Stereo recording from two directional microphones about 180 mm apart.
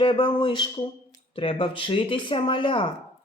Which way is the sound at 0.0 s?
25° left (ahead or behind).